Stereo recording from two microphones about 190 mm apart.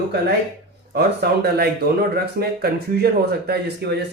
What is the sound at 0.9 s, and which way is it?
Speech, 55° right (ahead or behind).